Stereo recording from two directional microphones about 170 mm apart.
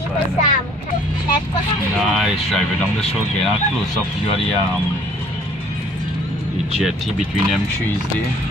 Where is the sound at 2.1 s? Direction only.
Centre (ahead or behind).